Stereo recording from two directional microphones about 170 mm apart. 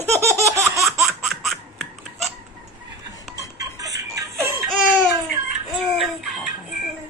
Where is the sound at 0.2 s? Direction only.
15° right (ahead or behind).